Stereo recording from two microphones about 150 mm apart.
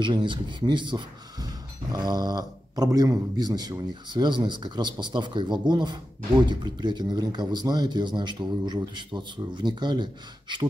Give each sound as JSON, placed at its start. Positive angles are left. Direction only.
{"t": 0.0, "sound": "speech", "side_deg": -30}